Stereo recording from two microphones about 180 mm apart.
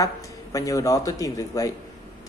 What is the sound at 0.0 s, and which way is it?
A woman's voice, 20° left (ahead or behind).